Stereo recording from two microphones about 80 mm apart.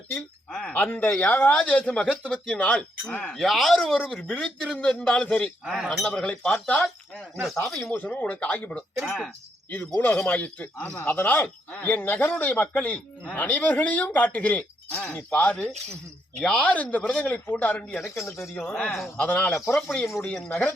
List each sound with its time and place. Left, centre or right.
0.7 s speech: left
3.3 s speech: centre
5.6 s speech: centre
6.1 s speech: centre
6.7 s a sound: centre
7.5 s speech: centre
7.9 s speech: left
9.0 s speech: centre
9.6 s speech: left
18.0 s speech: left
18.5 s speech: left
18.9 s speech: centre
19.1 s speech: centre